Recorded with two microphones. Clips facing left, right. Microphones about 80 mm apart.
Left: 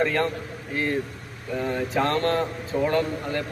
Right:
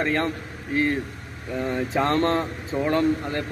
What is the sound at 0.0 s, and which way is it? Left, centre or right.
Speech, right.